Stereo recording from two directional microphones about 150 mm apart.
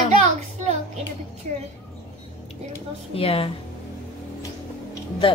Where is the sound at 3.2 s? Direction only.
40° left (ahead or behind).